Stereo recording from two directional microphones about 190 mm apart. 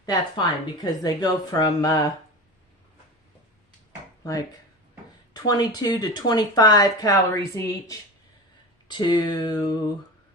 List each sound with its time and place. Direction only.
0.0 s speech: 20° left (ahead or behind)
4.2 s speech: 20° left (ahead or behind)